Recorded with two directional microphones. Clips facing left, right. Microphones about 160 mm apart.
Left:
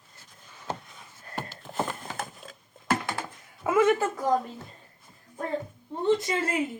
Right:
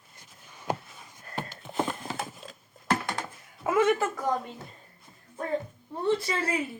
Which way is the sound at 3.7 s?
25° left (ahead or behind).